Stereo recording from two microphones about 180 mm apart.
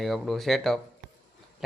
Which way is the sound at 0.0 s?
Centre (ahead or behind).